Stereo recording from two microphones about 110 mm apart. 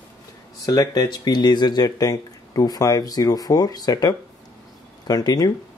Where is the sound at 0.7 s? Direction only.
35° left (ahead or behind).